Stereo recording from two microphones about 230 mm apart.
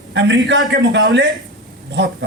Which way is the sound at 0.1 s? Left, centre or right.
Right.